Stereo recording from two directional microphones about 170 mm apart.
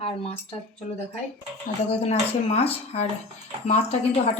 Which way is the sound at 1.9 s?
40° left (ahead or behind).